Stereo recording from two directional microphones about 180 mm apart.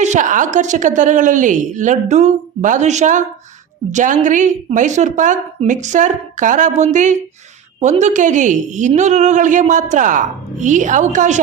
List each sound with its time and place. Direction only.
0.0 s a woman's voice: 45° right (ahead or behind)